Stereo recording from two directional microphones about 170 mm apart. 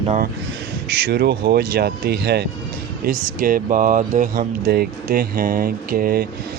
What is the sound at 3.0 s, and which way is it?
Speech, 55° right (ahead or behind).